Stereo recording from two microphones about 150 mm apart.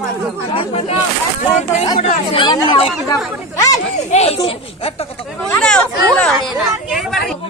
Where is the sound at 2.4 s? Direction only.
35° left (ahead or behind).